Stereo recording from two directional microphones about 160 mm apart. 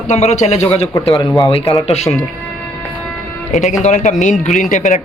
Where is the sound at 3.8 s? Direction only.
50° left (ahead or behind).